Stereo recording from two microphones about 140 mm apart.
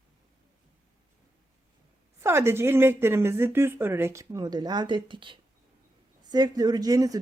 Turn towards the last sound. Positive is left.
turn(degrees=-25)  # may be behind; listen again after turning